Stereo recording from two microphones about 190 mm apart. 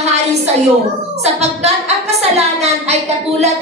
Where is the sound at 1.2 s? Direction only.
35° right (ahead or behind).